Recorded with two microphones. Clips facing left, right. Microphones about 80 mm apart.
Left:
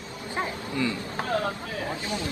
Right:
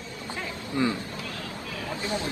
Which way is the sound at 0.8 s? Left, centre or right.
Right.